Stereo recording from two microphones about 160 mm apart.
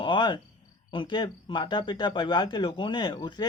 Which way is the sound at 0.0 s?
30° left (ahead or behind).